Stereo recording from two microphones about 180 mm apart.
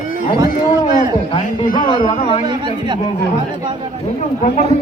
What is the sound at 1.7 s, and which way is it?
Carnatic music, 30° left (ahead or behind).